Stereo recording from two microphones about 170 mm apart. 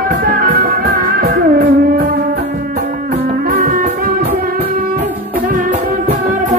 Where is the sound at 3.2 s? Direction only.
60° right (ahead or behind).